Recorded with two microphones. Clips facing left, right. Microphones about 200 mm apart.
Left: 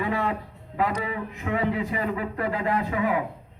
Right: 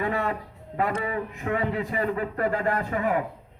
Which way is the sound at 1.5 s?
45° right (ahead or behind).